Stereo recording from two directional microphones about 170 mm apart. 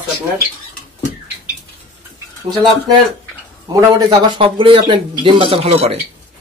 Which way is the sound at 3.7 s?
30° right (ahead or behind).